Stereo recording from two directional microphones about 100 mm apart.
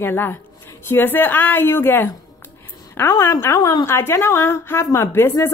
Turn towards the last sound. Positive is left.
turn(degrees=25)  # may be behind; listen again after turning